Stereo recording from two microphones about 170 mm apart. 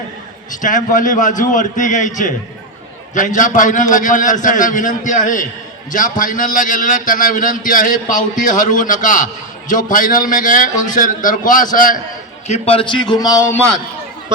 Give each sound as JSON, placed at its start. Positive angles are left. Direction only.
{"t": 0.6, "sound": "a man's voice", "side_deg": 50}
{"t": 12.5, "sound": "speech", "side_deg": 40}